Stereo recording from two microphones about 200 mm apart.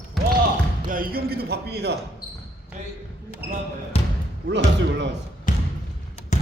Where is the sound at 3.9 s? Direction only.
30° left (ahead or behind).